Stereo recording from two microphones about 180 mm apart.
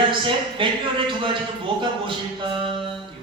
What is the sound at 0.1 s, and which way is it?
A man's voice, 30° right (ahead or behind).